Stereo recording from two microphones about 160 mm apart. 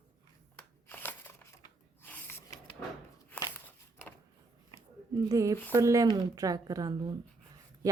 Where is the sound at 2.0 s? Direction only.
10° left (ahead or behind).